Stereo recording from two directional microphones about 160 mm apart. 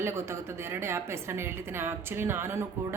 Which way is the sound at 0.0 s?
15° right (ahead or behind).